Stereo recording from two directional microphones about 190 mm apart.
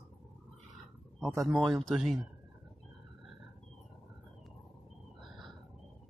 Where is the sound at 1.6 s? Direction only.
Centre (ahead or behind).